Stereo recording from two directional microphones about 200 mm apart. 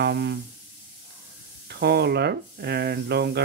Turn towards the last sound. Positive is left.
turn(degrees=-55)  # may be behind; listen again after turning